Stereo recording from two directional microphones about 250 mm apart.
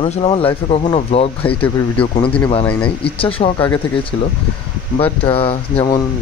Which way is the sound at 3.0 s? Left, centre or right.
Left.